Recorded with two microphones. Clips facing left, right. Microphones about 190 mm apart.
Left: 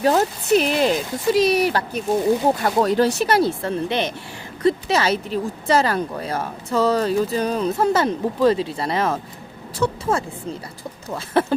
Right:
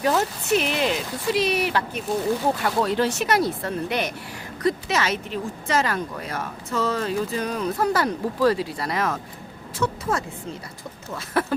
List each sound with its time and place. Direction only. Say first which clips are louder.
0.0 s speech: left 4 dB; 35° left (ahead or behind)
9.7 s a sound: left 4 dB; 30° left (ahead or behind)
11.1 s speech: left 5 dB; 30° left (ahead or behind)